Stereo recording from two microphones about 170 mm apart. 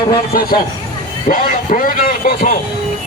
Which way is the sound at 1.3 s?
55° left (ahead or behind).